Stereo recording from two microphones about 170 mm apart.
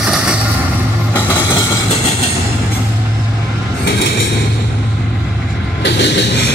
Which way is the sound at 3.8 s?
90° left.